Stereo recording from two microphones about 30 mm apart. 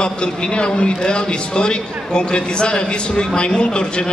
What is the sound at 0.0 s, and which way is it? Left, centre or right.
A man's voice, left.